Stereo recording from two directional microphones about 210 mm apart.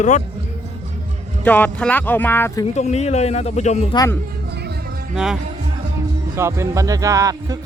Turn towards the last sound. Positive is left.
turn(degrees=-15)  # may be behind; listen again after turning